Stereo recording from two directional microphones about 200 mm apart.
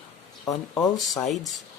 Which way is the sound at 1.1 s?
Centre (ahead or behind).